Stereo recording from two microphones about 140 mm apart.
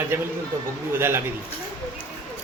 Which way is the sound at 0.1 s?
20° right (ahead or behind).